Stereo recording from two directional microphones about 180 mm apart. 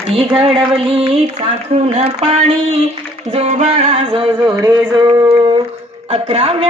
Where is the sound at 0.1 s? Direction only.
30° right (ahead or behind).